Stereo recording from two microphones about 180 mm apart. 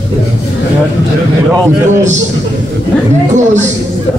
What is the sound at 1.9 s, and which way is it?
Speech, 40° right (ahead or behind).